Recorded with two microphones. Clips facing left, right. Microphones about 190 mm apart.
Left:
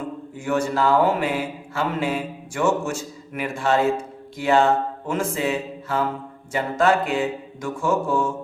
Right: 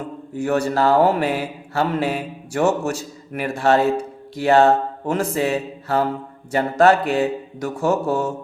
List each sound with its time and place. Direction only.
0.3 s speech: 40° right (ahead or behind)